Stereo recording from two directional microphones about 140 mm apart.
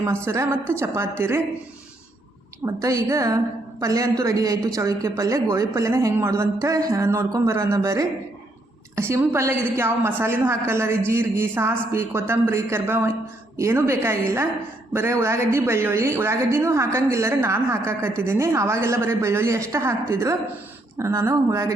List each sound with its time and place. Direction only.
0.3 s a woman's voice: 20° right (ahead or behind)
2.6 s a woman's voice: 20° right (ahead or behind)